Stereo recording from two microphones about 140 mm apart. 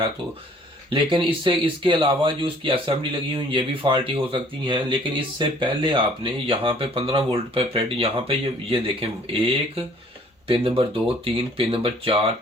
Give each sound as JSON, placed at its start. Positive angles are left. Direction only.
{"t": 0.9, "sound": "speech", "side_deg": -35}
{"t": 10.5, "sound": "speech", "side_deg": -40}